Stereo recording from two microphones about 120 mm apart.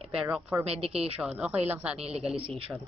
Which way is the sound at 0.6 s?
55° right (ahead or behind).